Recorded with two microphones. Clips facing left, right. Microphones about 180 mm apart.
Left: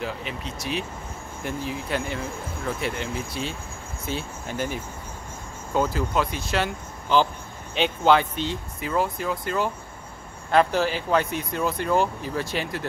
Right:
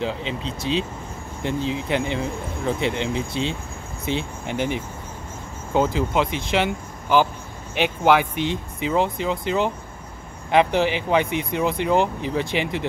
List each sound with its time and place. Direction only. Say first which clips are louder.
0.3 s speech: right 5 dB; 25° right (ahead or behind)
2.9 s speech: right 5 dB; 90° right
4.0 s speech: right 5 dB; 20° right (ahead or behind)
5.7 s speech: right 3 dB; 20° right (ahead or behind)